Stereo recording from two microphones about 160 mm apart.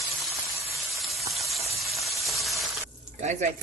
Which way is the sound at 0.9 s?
Centre (ahead or behind).